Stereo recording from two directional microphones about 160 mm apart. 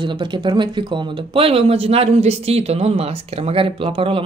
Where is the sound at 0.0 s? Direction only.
30° right (ahead or behind).